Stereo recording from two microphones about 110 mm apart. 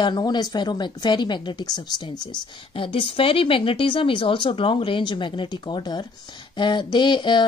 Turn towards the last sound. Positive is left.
turn(degrees=45)  # may be behind; listen again after turning